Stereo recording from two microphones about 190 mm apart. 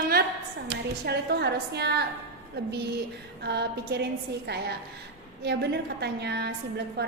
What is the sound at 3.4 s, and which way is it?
A woman's voice, 60° right (ahead or behind).